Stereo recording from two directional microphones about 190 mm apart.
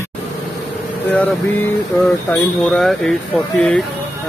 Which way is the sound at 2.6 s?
Centre (ahead or behind).